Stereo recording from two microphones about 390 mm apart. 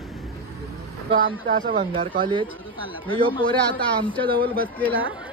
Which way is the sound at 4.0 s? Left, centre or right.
Centre.